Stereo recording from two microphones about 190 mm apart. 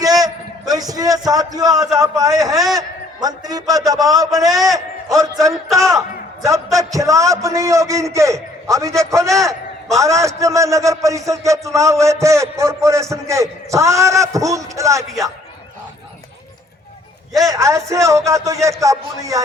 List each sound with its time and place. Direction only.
0.0 s a sound: 20° right (ahead or behind)
1.5 s a man's voice: 15° right (ahead or behind)
5.6 s speech: centre (ahead or behind)
6.4 s a man's voice: 15° right (ahead or behind)
17.5 s a man's voice: 15° right (ahead or behind)